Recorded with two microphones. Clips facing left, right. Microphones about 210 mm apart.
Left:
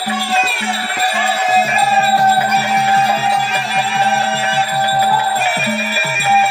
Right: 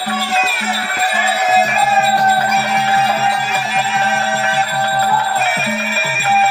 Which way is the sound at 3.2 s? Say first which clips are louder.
Left 1 dB; 5° right (ahead or behind).